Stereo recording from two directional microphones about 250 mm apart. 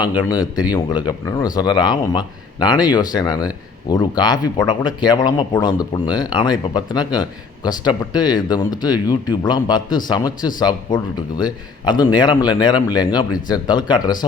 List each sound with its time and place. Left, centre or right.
0.0 s speech: centre